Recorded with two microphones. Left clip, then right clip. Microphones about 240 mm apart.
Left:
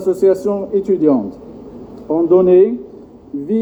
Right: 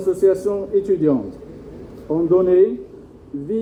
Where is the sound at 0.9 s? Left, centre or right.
Left.